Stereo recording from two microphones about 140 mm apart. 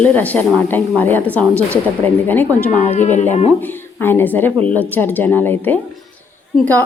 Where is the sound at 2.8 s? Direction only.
55° left (ahead or behind).